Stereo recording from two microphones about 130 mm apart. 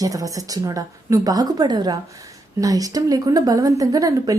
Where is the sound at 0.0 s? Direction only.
25° right (ahead or behind).